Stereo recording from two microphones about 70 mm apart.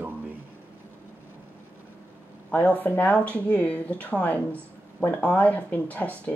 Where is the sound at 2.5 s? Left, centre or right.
Centre.